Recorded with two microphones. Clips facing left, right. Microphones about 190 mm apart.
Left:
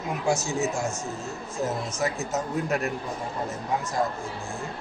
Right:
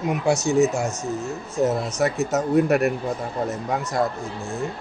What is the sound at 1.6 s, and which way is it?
Speech, 65° right (ahead or behind).